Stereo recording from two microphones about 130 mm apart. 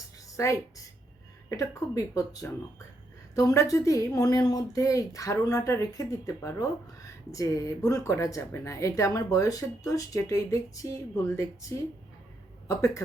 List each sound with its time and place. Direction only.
0.3 s a woman's voice: 25° left (ahead or behind)
12.6 s speech: 25° left (ahead or behind)